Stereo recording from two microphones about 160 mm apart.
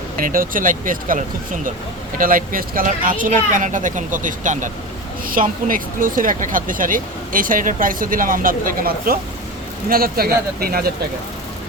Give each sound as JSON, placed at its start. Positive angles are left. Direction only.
{"t": 0.2, "sound": "speech", "side_deg": -60}